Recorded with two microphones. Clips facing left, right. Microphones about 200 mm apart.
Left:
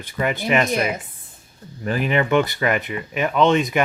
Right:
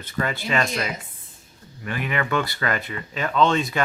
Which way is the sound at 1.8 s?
35° left (ahead or behind).